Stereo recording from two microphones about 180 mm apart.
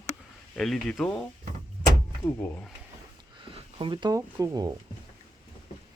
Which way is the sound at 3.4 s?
30° right (ahead or behind).